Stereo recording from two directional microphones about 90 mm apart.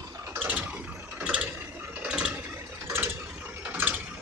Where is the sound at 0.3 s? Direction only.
20° right (ahead or behind).